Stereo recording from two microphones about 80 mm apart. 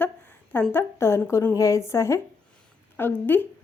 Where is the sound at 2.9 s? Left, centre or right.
Left.